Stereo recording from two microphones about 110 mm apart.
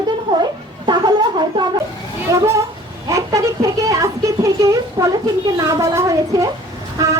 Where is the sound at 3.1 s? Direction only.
30° right (ahead or behind).